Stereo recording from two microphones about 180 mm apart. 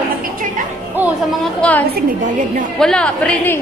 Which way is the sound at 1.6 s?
5° left (ahead or behind).